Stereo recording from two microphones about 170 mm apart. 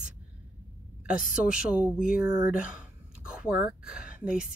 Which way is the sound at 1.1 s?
55° left (ahead or behind).